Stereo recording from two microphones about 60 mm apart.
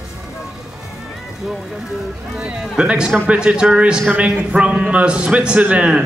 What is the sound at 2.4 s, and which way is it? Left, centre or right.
A man's voice, centre.